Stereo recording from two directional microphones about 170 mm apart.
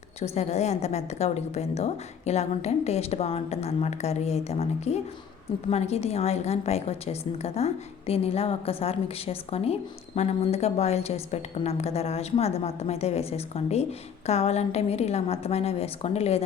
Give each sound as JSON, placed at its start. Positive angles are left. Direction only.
{"t": 0.2, "sound": "a woman's voice", "side_deg": 40}